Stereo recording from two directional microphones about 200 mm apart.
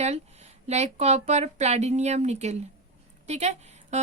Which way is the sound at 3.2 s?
35° right (ahead or behind).